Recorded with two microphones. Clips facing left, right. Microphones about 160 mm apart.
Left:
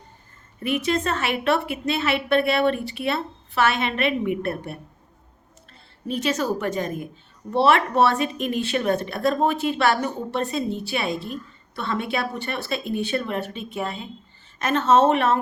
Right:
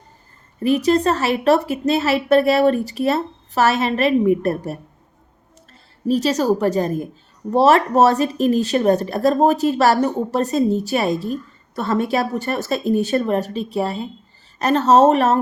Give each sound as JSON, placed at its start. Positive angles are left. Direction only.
{"t": 0.6, "sound": "speech", "side_deg": -35}
{"t": 6.1, "sound": "speech", "side_deg": -35}